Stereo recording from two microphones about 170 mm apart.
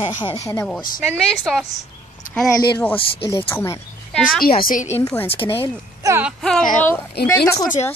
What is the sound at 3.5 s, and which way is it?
Speech, 15° left (ahead or behind).